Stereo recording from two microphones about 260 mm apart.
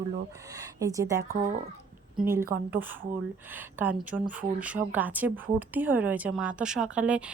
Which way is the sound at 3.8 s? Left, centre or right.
Centre.